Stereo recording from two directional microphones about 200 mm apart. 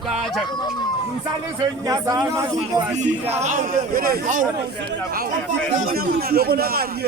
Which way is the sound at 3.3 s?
35° right (ahead or behind).